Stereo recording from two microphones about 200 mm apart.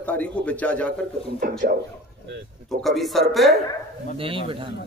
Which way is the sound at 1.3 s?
45° right (ahead or behind).